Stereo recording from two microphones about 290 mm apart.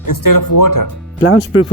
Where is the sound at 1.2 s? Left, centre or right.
Left.